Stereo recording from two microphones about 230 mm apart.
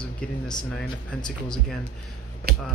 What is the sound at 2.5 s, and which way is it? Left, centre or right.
Music, right.